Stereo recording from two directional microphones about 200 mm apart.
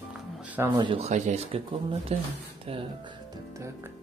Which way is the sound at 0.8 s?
30° right (ahead or behind).